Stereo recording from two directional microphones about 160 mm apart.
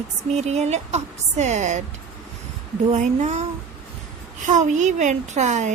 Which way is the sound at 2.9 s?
45° right (ahead or behind).